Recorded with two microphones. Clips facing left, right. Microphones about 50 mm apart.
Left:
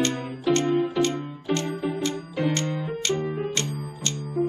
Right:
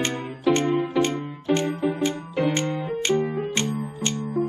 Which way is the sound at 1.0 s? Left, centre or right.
Right.